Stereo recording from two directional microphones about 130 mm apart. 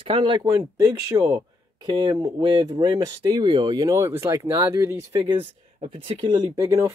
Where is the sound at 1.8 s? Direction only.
35° right (ahead or behind).